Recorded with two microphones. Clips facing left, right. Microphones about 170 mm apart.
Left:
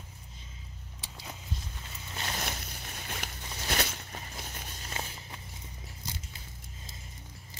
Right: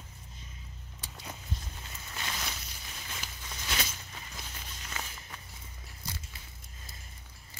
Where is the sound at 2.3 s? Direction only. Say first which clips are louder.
Left 5 dB; 50° left (ahead or behind).